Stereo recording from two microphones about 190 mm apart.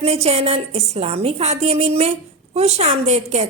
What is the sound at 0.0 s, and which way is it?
A woman's voice, 35° right (ahead or behind).